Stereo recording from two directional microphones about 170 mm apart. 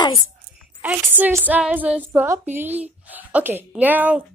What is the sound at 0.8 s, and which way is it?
Speech, 10° right (ahead or behind).